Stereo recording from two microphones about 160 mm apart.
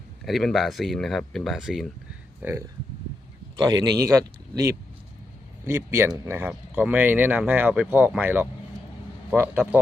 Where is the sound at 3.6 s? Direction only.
25° right (ahead or behind).